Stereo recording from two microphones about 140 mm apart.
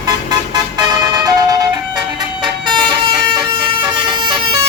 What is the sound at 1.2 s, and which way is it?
Siren, 25° right (ahead or behind).